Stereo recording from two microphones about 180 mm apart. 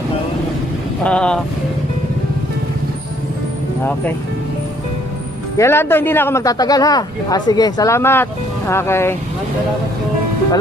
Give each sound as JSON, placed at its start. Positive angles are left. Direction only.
{"t": 1.0, "sound": "speech", "side_deg": 5}
{"t": 5.6, "sound": "a man's voice", "side_deg": 15}